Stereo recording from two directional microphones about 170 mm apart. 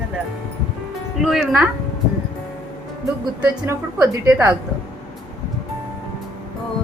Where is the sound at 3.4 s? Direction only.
15° right (ahead or behind).